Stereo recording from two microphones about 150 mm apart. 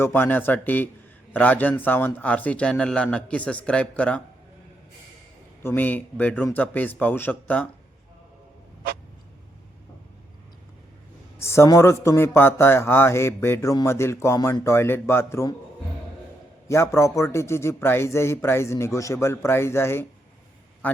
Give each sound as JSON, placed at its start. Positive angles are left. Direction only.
{"t": 0.0, "sound": "a man's voice", "side_deg": 15}
{"t": 5.6, "sound": "a man's voice", "side_deg": 10}
{"t": 11.3, "sound": "a man's voice", "side_deg": 15}
{"t": 16.6, "sound": "a man's voice", "side_deg": 20}